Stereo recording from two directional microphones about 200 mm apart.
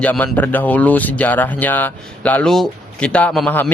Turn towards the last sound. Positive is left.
turn(degrees=5)  # may be behind; listen again after turning